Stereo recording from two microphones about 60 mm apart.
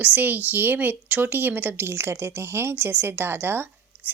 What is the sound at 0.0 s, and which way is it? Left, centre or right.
A woman's voice, right.